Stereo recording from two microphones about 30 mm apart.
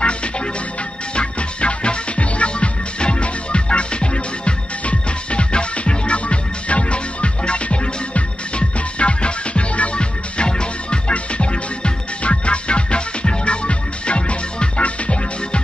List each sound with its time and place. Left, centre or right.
1.1 s music: left